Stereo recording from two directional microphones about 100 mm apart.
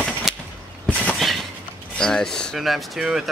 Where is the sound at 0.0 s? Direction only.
5° right (ahead or behind).